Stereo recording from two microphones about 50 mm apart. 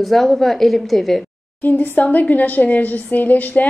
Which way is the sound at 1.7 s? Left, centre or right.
Left.